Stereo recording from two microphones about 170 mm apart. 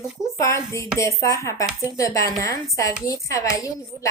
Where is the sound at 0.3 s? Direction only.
15° left (ahead or behind).